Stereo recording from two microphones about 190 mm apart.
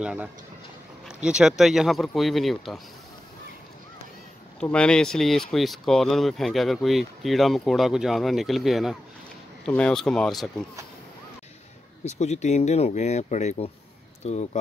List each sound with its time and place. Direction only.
0.0 s speech: 5° right (ahead or behind)
4.6 s speech: 5° left (ahead or behind)
12.0 s speech: 35° left (ahead or behind)